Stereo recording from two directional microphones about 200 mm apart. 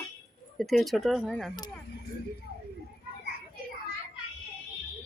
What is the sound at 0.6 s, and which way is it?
Speech, centre (ahead or behind).